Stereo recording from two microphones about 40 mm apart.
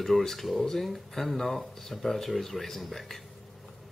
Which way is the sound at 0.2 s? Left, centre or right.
Centre.